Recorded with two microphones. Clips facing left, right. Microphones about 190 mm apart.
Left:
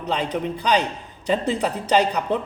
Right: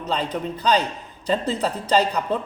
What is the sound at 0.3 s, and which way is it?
Speech, 15° left (ahead or behind).